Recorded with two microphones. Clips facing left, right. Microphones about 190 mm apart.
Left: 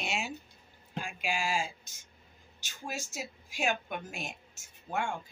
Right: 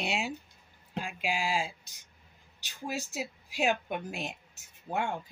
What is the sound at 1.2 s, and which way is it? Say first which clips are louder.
Speech: right 1 dB; 20° right (ahead or behind).